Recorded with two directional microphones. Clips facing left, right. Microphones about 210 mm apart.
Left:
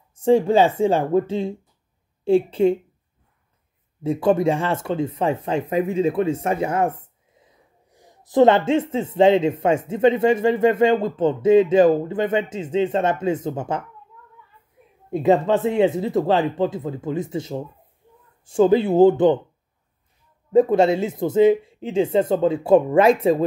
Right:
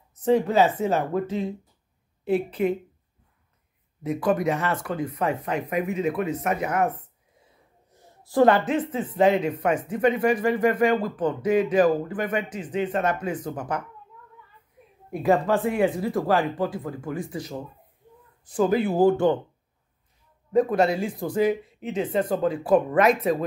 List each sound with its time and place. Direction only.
0.1 s speech: 30° left (ahead or behind)
4.0 s speech: 30° left (ahead or behind)
15.0 s speech: 25° left (ahead or behind)
20.5 s speech: 25° left (ahead or behind)